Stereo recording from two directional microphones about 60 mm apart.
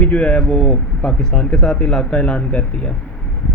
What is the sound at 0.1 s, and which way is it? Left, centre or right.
A man's voice, centre.